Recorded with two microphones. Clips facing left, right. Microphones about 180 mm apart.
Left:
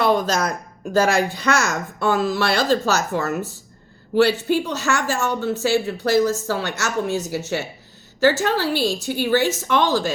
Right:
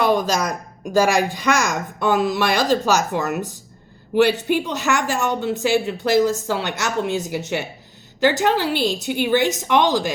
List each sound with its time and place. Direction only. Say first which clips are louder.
0.0 s speech: even; 15° right (ahead or behind)